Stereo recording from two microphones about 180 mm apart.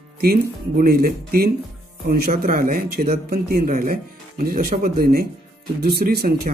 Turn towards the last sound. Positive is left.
turn(degrees=-55)  # may be behind; listen again after turning